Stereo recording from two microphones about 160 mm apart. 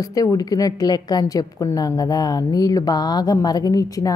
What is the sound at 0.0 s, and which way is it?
A woman's voice, 20° left (ahead or behind).